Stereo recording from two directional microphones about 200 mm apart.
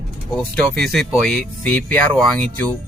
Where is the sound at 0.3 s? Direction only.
Centre (ahead or behind).